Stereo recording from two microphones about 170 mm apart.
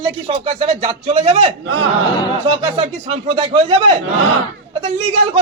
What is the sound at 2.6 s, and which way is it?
Speech, 35° right (ahead or behind).